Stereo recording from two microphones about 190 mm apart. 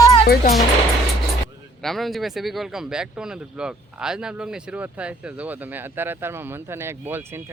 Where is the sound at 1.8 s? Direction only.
Centre (ahead or behind).